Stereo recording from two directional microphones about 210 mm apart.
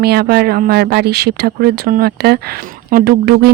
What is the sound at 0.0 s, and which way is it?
Speech, 50° right (ahead or behind).